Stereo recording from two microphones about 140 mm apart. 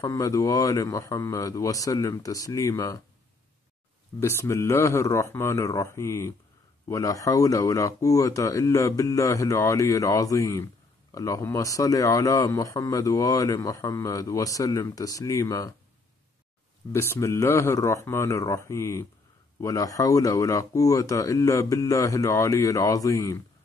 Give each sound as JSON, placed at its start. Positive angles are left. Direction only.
{"t": 0.0, "sound": "speech", "side_deg": 20}
{"t": 4.2, "sound": "speech", "side_deg": 15}
{"t": 16.9, "sound": "speech", "side_deg": 20}